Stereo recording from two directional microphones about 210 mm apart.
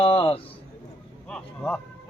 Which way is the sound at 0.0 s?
25° left (ahead or behind).